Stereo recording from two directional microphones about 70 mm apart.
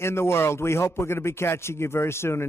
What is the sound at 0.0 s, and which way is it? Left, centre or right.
A man's voice, left.